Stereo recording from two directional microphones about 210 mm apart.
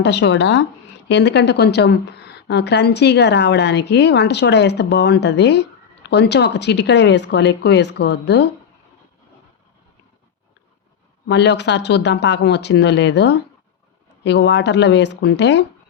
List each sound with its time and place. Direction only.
0.0 s a woman's voice: 55° left (ahead or behind)
11.3 s speech: 55° left (ahead or behind)